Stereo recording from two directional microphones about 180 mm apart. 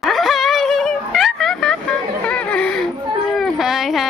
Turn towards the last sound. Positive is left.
turn(degrees=0)  # may be behind; listen again after turning